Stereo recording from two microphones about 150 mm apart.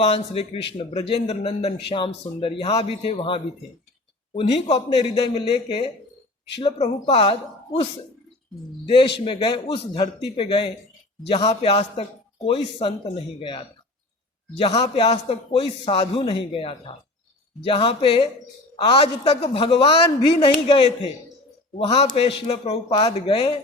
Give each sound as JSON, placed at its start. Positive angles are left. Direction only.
{"t": 0.0, "sound": "a man's voice", "side_deg": 40}
{"t": 8.9, "sound": "a man's voice", "side_deg": 35}